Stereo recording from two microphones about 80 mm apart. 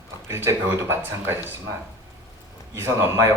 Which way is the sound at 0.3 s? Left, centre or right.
Right.